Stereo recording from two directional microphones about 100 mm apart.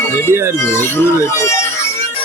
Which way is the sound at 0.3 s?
25° right (ahead or behind).